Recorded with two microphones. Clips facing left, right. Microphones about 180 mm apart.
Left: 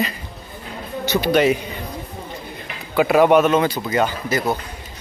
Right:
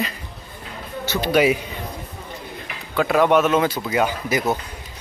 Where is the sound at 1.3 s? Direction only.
5° right (ahead or behind).